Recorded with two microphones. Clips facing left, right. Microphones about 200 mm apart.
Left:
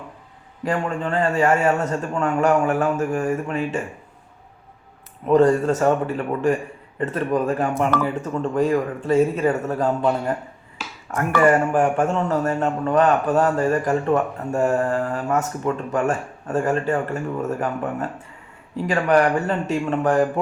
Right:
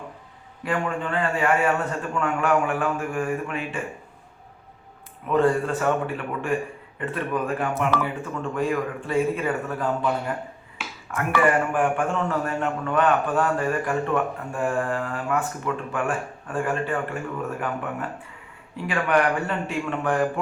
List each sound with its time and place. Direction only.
0.6 s a man's voice: 40° left (ahead or behind)
5.2 s a man's voice: 40° left (ahead or behind)
11.1 s a man's voice: 40° left (ahead or behind)
18.9 s a man's voice: 40° left (ahead or behind)